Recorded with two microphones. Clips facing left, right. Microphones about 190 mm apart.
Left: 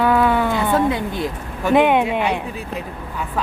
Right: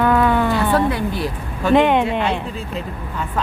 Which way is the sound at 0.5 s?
20° left (ahead or behind).